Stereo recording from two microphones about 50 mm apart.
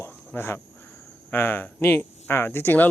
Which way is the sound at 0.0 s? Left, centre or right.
Left.